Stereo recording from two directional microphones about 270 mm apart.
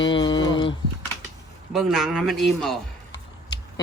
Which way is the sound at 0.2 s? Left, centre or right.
Centre.